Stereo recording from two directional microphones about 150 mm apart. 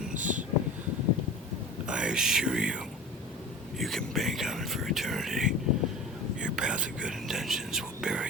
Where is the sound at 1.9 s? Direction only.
5° right (ahead or behind).